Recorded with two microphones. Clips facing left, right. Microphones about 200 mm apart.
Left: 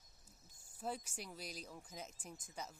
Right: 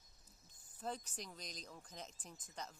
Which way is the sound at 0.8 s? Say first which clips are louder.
Left 1 dB; 10° left (ahead or behind).